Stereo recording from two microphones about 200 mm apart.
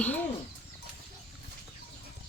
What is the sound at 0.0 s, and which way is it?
Bird, 10° left (ahead or behind).